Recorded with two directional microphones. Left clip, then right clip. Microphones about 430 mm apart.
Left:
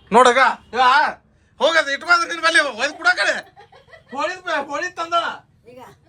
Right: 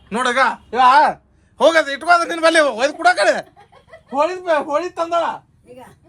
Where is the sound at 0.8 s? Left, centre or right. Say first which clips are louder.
Right 4 dB; centre.